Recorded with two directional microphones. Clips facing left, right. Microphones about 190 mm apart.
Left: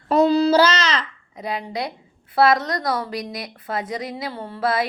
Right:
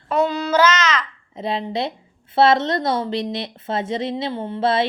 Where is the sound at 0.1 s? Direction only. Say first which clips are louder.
Left 4 dB; 35° left (ahead or behind).